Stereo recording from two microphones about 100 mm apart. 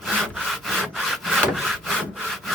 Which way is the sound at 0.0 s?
Centre (ahead or behind).